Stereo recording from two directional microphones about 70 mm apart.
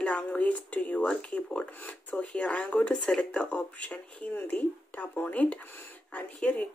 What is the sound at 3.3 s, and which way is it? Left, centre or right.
Speech, left.